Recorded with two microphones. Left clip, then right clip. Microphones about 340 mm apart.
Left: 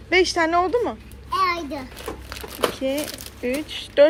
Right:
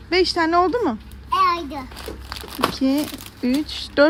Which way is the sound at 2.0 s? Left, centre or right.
Centre.